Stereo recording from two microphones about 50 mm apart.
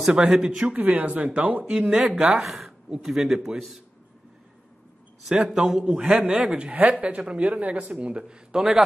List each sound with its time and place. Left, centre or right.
0.3 s a man's voice: centre
0.7 s speech: right
1.7 s a man's voice: centre
5.3 s a man's voice: centre
6.7 s speech: right; by 8.8 s centre